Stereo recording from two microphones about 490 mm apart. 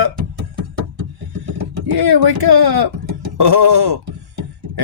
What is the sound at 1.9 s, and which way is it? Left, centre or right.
Speech, right.